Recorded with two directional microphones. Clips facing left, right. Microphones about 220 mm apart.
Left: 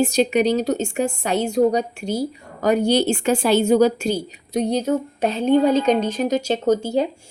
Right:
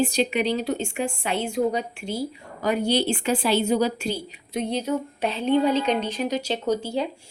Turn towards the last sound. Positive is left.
turn(degrees=45)  # may be behind; listen again after turning